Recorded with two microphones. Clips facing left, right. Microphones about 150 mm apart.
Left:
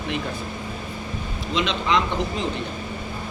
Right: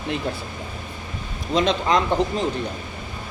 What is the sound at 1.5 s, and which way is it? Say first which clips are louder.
Speech: right 3 dB; 40° right (ahead or behind).